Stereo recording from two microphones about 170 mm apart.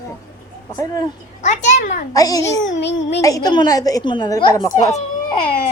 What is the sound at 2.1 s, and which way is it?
Speech, 20° left (ahead or behind).